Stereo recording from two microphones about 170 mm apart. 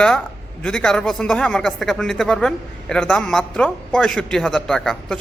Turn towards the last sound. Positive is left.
turn(degrees=5)  # may be behind; listen again after turning